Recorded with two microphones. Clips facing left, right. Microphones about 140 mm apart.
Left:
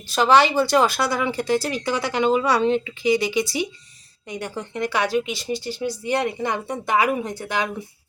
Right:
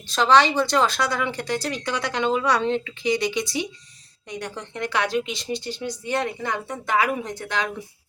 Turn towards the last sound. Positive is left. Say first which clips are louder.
# left 2 dB
turn(degrees=10)  # may be behind; listen again after turning